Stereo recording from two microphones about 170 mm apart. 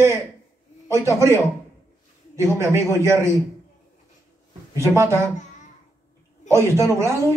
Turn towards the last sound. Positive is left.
turn(degrees=-15)  # may be behind; listen again after turning